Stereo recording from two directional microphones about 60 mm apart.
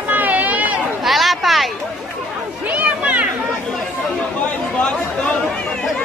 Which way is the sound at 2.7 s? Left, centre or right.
Right.